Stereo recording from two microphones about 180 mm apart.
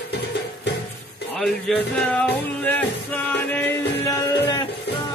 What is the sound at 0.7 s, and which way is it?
Music, 70° left (ahead or behind).